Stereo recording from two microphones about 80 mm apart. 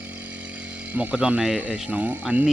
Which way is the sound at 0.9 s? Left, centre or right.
Centre.